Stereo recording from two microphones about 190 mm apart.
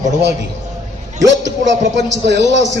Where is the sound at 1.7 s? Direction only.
70° right (ahead or behind).